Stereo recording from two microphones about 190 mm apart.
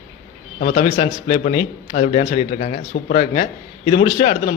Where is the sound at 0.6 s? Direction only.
40° left (ahead or behind).